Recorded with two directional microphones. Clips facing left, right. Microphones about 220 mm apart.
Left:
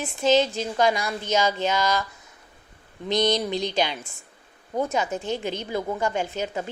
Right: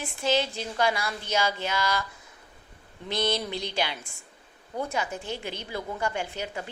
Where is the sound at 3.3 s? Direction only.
20° left (ahead or behind).